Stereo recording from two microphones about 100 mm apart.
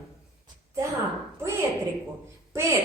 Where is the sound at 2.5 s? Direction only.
25° right (ahead or behind).